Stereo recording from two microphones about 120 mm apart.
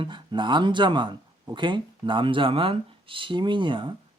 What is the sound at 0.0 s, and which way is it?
Speech, 40° right (ahead or behind).